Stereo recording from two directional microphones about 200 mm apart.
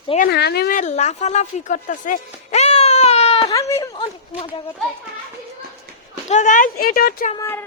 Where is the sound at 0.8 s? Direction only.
35° left (ahead or behind).